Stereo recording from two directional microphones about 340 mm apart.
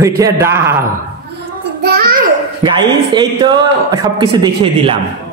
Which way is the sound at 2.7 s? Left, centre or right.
Centre.